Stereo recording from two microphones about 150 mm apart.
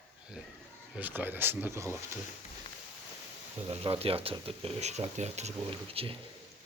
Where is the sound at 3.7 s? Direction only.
40° right (ahead or behind).